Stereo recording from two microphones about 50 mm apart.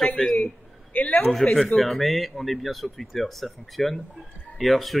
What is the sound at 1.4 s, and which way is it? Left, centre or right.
A man's voice, centre.